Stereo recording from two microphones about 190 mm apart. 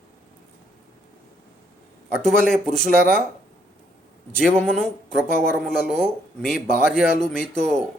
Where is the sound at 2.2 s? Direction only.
5° left (ahead or behind).